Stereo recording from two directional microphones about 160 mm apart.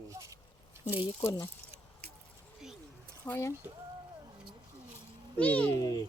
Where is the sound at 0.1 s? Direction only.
20° right (ahead or behind).